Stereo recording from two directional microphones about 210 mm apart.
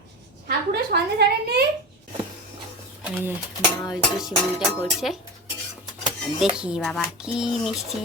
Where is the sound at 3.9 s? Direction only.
Centre (ahead or behind).